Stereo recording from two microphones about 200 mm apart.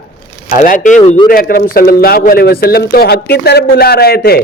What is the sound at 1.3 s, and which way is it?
A man's voice, 45° left (ahead or behind).